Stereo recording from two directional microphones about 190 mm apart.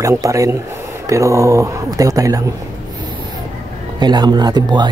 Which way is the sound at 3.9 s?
20° right (ahead or behind).